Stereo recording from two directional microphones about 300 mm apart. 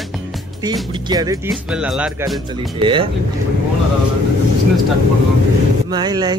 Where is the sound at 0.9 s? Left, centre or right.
Centre.